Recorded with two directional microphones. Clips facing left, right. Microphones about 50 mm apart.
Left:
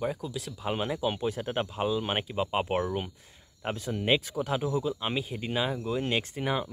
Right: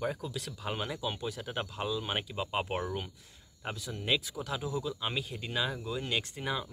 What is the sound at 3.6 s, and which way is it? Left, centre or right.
Speech, left.